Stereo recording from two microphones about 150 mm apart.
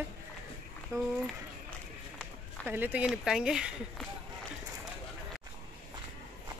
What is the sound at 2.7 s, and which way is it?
Speech, 10° right (ahead or behind).